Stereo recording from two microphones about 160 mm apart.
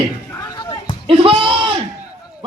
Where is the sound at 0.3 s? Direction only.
25° left (ahead or behind).